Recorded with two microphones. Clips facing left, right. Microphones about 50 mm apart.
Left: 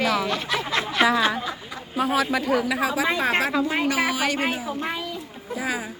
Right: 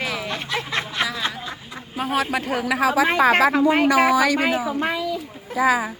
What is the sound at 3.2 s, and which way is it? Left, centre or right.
Speech, right.